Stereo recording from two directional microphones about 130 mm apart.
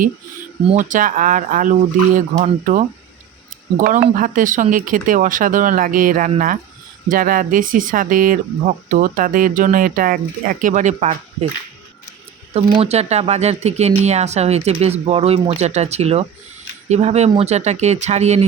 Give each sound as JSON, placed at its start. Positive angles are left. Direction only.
{"t": 0.7, "sound": "speech", "side_deg": -75}
{"t": 12.5, "sound": "speech", "side_deg": -45}